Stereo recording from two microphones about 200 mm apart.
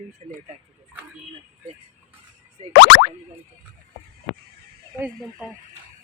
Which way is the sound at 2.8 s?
55° left (ahead or behind).